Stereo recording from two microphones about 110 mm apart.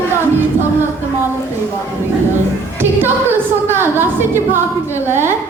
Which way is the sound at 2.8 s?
20° right (ahead or behind).